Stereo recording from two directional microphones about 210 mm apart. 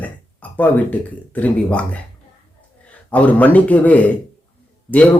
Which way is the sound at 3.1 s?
5° left (ahead or behind).